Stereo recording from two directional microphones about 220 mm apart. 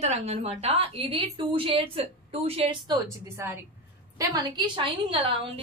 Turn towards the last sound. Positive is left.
turn(degrees=-25)  # may be behind; listen again after turning